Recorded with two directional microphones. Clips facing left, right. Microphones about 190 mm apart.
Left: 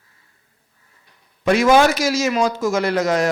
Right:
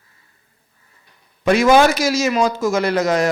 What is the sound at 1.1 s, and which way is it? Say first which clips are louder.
A man's voice: right 1 dB; 10° right (ahead or behind).